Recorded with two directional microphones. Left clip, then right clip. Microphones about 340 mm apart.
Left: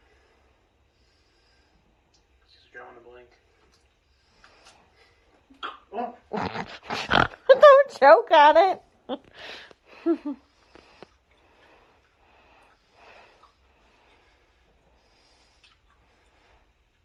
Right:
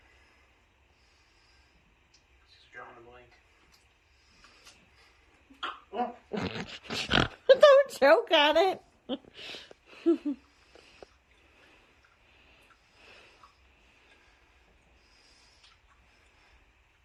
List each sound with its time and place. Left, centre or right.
6.3 s speech: centre